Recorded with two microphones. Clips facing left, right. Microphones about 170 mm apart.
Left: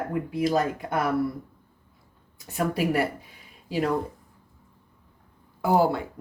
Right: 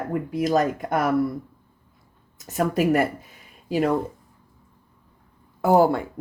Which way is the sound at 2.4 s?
45° right (ahead or behind).